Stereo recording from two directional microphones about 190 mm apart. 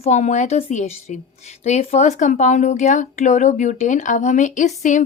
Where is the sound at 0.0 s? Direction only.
35° left (ahead or behind).